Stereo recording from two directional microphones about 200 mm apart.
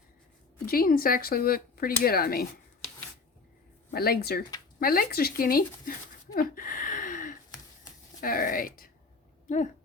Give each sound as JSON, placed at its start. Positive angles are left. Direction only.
{"t": 0.6, "sound": "speech", "side_deg": 45}
{"t": 3.9, "sound": "speech", "side_deg": 50}
{"t": 6.3, "sound": "a sound", "side_deg": 45}
{"t": 8.2, "sound": "speech", "side_deg": 45}